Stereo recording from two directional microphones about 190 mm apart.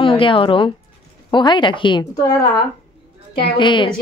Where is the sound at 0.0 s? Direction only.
25° left (ahead or behind).